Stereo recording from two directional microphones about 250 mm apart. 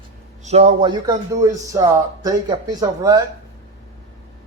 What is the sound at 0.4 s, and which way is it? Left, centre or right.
Speech, right.